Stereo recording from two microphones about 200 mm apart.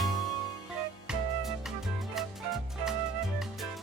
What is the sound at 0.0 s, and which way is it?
Music, centre (ahead or behind).